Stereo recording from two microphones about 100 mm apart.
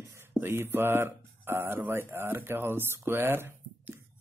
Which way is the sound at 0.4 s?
25° right (ahead or behind).